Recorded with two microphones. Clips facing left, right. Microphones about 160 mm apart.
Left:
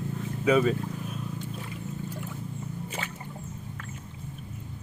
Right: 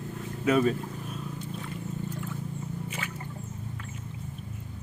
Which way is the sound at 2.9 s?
30° left (ahead or behind).